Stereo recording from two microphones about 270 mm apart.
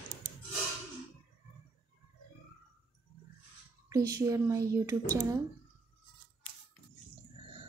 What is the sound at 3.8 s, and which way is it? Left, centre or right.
Speech, centre.